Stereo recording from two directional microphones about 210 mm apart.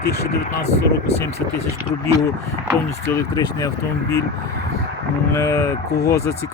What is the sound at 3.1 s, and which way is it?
Speech, 15° left (ahead or behind).